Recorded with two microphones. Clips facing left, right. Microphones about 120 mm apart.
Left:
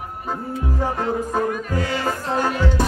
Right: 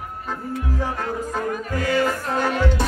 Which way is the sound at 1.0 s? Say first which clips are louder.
Left 4 dB; 25° left (ahead or behind).